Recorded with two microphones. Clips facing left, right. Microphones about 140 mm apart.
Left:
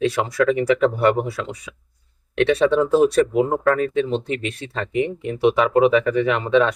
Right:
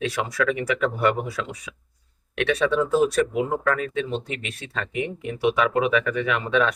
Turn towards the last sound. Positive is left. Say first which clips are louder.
# left 5 dB
turn(degrees=25)  # may be behind; listen again after turning